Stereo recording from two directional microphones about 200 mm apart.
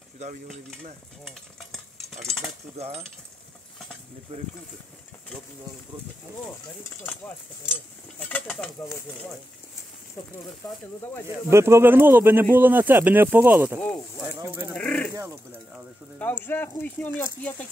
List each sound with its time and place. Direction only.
0.2 s stir: 35° right (ahead or behind)
1.2 s stir: centre (ahead or behind)
4.3 s speech: 30° right (ahead or behind)
6.6 s speech: 10° left (ahead or behind)
11.5 s speech: 15° right (ahead or behind)
13.7 s speech: 10° left (ahead or behind)
14.4 s speech: 10° right (ahead or behind)
14.8 s speech: 5° left (ahead or behind)
15.1 s speech: 15° right (ahead or behind)
16.2 s speech: 10° left (ahead or behind)